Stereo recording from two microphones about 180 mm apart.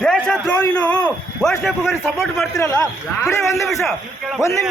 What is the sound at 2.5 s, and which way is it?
A man's voice, 20° left (ahead or behind).